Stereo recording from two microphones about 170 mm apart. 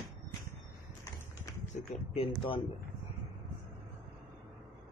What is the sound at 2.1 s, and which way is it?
Speech, 35° left (ahead or behind).